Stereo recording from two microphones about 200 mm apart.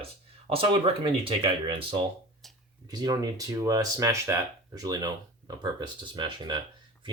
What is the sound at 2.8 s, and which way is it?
Speech, 20° right (ahead or behind).